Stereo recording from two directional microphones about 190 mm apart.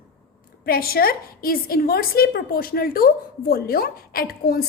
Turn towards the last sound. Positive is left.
turn(degrees=50)  # may be behind; listen again after turning